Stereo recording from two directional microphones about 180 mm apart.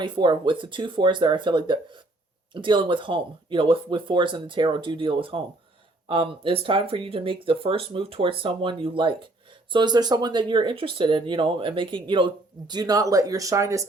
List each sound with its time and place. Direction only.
0.0 s speech: 25° right (ahead or behind)